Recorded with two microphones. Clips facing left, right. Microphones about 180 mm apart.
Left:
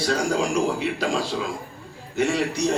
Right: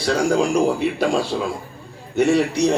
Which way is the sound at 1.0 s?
60° right (ahead or behind).